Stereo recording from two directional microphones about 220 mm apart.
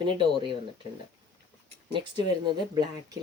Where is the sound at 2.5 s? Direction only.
20° right (ahead or behind).